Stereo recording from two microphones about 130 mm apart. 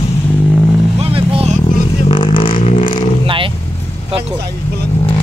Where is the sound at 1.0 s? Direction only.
50° right (ahead or behind).